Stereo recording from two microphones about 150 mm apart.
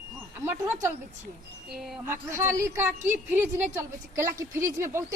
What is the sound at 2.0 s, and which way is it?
A woman's voice, 15° right (ahead or behind).